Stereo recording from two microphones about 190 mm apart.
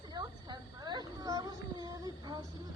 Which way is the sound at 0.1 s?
20° right (ahead or behind).